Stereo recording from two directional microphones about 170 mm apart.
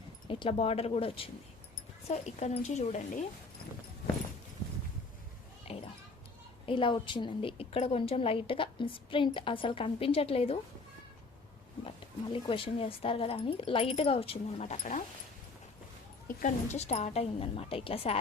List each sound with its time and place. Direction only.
0.3 s a woman's voice: 30° left (ahead or behind)
5.6 s a sound: 35° left (ahead or behind)
6.7 s a woman's voice: 30° left (ahead or behind)
12.3 s a woman's voice: 30° left (ahead or behind)
16.2 s a woman's voice: 45° left (ahead or behind)